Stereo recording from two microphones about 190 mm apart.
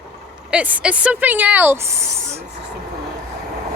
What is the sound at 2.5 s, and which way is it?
Vehicle, 65° right (ahead or behind).